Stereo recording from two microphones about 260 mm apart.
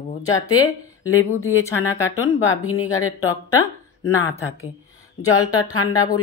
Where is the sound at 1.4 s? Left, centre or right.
Centre.